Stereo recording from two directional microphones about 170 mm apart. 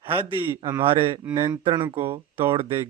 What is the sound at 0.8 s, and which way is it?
Speech, 35° right (ahead or behind).